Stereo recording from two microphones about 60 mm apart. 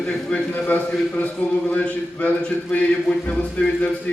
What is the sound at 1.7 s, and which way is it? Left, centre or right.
Speech, left.